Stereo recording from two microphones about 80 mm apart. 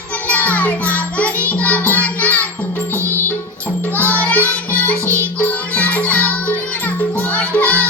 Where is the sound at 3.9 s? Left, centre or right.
Left.